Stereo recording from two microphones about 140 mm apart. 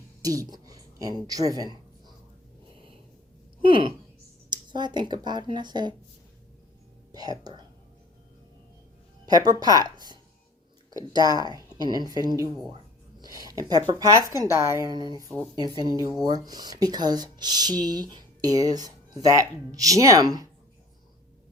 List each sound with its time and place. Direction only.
0.2 s speech: 25° right (ahead or behind)
3.6 s speech: 35° right (ahead or behind)
7.1 s speech: 25° right (ahead or behind)
9.2 s speech: 30° right (ahead or behind)
10.9 s speech: 30° right (ahead or behind)